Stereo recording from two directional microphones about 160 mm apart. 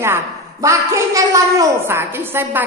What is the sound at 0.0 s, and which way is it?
A woman's voice, 15° right (ahead or behind).